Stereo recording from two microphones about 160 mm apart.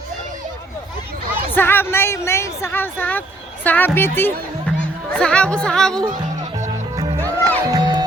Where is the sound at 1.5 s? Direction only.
10° left (ahead or behind).